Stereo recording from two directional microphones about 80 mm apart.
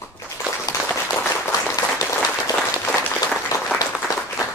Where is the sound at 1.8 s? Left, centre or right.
Left.